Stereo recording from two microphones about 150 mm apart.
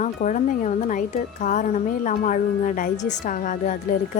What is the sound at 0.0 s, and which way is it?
A woman's voice, 55° left (ahead or behind).